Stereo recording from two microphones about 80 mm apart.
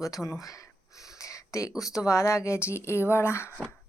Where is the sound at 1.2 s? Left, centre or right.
Left.